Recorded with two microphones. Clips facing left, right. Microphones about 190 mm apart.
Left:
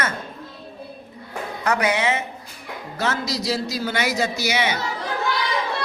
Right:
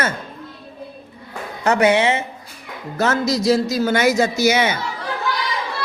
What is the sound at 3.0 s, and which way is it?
A man's voice, 45° right (ahead or behind).